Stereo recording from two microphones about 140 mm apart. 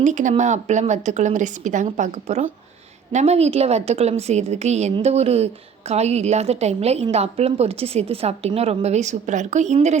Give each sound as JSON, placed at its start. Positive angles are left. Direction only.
{"t": 0.0, "sound": "a woman's voice", "side_deg": -60}